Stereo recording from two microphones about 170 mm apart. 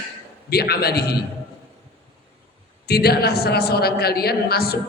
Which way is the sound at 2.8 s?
70° left (ahead or behind).